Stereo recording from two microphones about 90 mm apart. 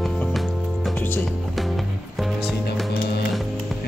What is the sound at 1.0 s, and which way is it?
Speech, 25° left (ahead or behind).